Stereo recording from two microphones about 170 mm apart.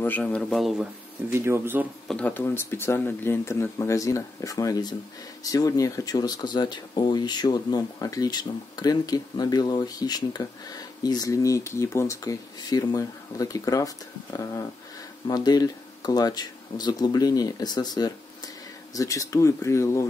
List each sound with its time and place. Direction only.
0.0 s speech: 10° left (ahead or behind)
1.3 s speech: 15° right (ahead or behind)
2.0 s speech: 5° left (ahead or behind)